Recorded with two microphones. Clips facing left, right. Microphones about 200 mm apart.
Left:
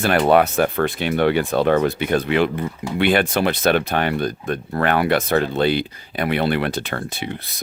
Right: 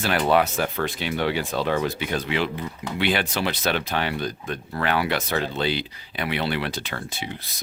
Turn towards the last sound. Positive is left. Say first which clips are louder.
# left 6 dB
turn(degrees=55)  # may be behind; listen again after turning